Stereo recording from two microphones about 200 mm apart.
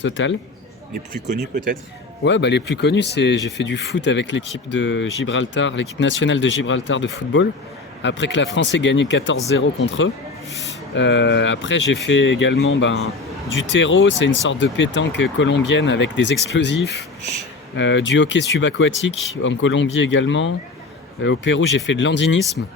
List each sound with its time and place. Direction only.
0.0 s speech: 70° left (ahead or behind)
0.9 s speech: 45° right (ahead or behind)
2.2 s speech: 60° left (ahead or behind)